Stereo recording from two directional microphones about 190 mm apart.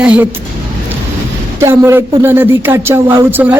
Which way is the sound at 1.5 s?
15° right (ahead or behind).